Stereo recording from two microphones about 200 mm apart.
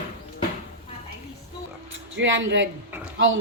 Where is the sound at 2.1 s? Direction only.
70° right (ahead or behind).